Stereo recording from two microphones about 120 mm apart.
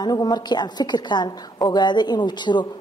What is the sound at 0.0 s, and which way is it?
A woman's voice, 35° left (ahead or behind).